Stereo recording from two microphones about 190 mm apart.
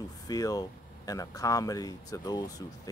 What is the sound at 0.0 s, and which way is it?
Speech, 20° left (ahead or behind).